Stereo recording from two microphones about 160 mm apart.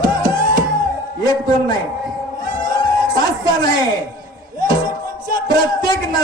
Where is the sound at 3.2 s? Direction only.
25° left (ahead or behind).